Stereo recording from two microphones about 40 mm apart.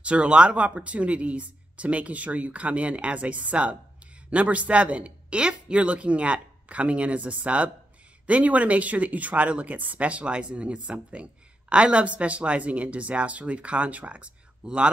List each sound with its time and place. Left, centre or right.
0.0 s speech: right